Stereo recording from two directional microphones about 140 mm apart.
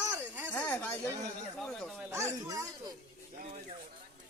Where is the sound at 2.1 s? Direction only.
20° right (ahead or behind).